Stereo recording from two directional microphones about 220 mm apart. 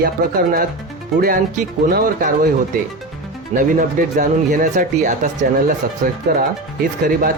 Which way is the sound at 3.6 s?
35° right (ahead or behind).